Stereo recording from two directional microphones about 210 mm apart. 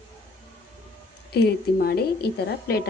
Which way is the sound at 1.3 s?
50° left (ahead or behind).